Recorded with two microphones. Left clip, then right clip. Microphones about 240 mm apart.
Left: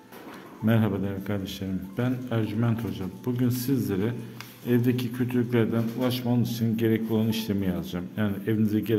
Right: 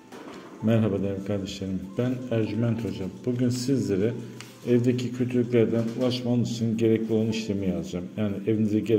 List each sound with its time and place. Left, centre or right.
0.7 s a man's voice: centre